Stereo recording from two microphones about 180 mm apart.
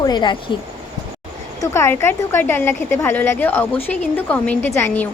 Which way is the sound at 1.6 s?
15° left (ahead or behind).